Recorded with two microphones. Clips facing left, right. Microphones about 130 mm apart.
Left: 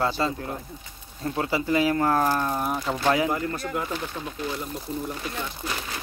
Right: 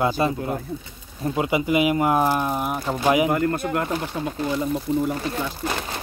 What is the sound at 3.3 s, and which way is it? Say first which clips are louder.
Speech: right 6 dB; 55° right (ahead or behind).